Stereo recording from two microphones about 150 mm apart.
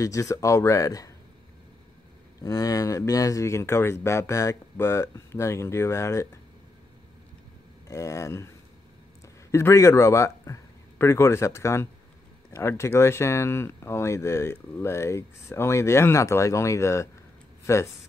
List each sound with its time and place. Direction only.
0.0 s speech: 20° left (ahead or behind)
2.4 s speech: 25° left (ahead or behind)
7.9 s speech: 20° left (ahead or behind)
9.5 s speech: 20° left (ahead or behind)